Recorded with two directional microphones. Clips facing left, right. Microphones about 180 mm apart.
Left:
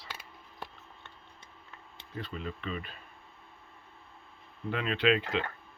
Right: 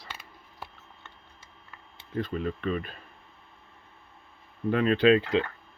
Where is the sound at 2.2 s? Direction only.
45° right (ahead or behind).